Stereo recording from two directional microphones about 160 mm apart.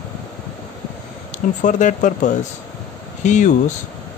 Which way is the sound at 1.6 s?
50° left (ahead or behind).